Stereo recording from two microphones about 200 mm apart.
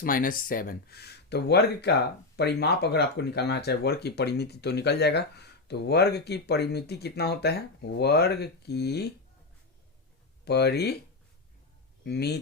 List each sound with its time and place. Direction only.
0.0 s speech: 45° left (ahead or behind)
10.4 s speech: 55° left (ahead or behind)
12.0 s speech: 55° left (ahead or behind)